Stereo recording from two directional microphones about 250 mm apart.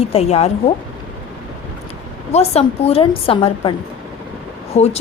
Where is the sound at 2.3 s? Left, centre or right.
Left.